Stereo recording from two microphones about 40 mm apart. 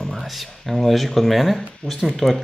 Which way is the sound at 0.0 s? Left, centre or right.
Centre.